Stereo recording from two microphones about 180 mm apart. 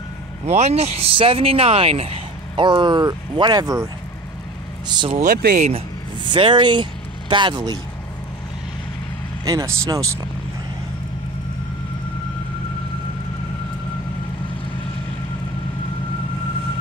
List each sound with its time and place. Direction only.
0.5 s speech: 40° right (ahead or behind)
5.2 s speech: 50° right (ahead or behind)
6.2 s speech: 25° right (ahead or behind)
9.4 s speech: 20° right (ahead or behind)